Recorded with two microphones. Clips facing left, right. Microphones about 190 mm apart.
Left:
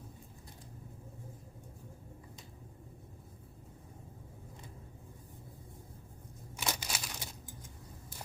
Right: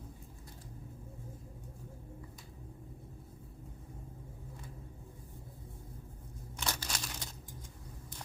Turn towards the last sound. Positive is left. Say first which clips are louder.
# even
turn(degrees=10)  # may be behind; listen again after turning